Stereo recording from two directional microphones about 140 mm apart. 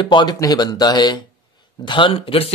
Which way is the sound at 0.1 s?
35° left (ahead or behind).